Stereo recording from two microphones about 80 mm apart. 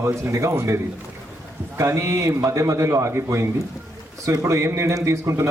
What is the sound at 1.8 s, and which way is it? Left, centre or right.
A man's voice, right.